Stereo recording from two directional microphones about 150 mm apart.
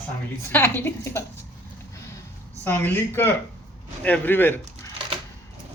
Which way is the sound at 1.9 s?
20° left (ahead or behind).